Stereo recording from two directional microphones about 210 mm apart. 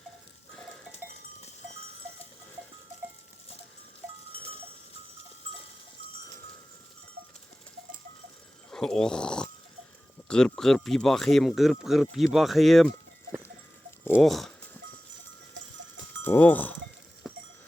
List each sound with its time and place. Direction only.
8.7 s speech: 5° left (ahead or behind)
14.0 s a sound: 5° left (ahead or behind)
15.6 s livestock: 55° right (ahead or behind)
16.2 s speech: 10° left (ahead or behind)